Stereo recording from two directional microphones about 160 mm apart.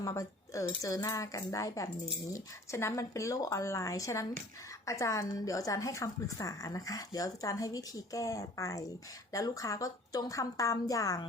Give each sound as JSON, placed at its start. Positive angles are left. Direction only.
{"t": 0.0, "sound": "a woman's voice", "side_deg": 20}